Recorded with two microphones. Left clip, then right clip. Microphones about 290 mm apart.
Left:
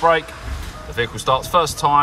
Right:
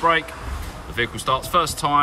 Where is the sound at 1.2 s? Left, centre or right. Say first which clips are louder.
Left 4 dB; centre.